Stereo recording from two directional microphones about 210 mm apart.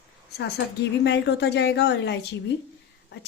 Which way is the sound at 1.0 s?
55° left (ahead or behind).